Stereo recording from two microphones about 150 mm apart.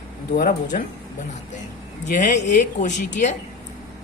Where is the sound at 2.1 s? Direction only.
55° left (ahead or behind).